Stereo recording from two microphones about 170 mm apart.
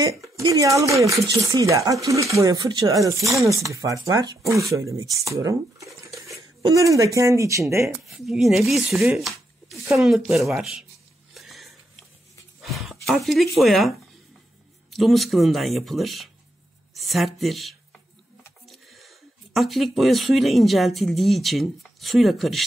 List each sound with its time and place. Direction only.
0.6 s speech: 20° right (ahead or behind)
8.1 s speech: centre (ahead or behind)
11.3 s a sound: centre (ahead or behind)
12.6 s speech: centre (ahead or behind)